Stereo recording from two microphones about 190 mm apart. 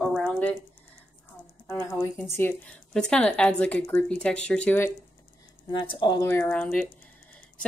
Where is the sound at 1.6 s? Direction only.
15° left (ahead or behind).